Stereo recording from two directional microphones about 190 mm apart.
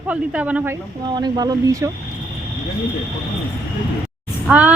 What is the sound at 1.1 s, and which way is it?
Speech, 20° right (ahead or behind).